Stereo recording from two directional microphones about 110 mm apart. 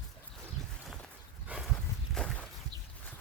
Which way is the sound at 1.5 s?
15° right (ahead or behind).